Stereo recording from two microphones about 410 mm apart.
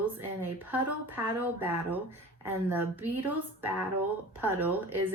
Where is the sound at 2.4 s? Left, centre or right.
Centre.